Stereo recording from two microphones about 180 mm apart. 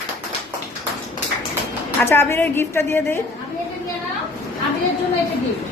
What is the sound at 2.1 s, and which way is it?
A woman's voice, 15° left (ahead or behind).